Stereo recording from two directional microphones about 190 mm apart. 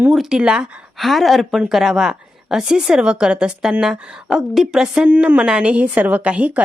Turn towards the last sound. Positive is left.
turn(degrees=-5)  # may be behind; listen again after turning